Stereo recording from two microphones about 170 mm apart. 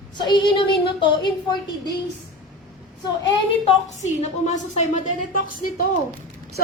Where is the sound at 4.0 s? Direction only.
45° left (ahead or behind).